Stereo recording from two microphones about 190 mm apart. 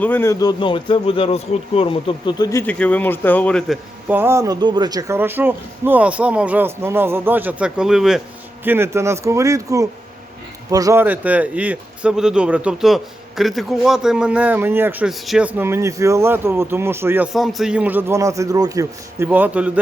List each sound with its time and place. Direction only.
0.0 s speech: 10° left (ahead or behind)
4.1 s speech: 10° right (ahead or behind)
17.3 s speech: centre (ahead or behind)